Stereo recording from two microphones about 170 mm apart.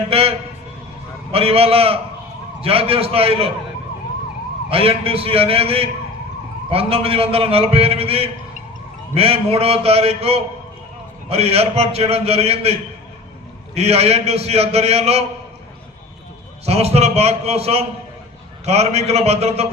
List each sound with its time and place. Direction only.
0.1 s a man's voice: 35° right (ahead or behind)
4.7 s a man's voice: 35° right (ahead or behind)
16.6 s a man's voice: 35° right (ahead or behind)